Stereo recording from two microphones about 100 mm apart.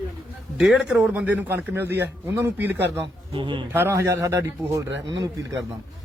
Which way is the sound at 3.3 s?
55° right (ahead or behind).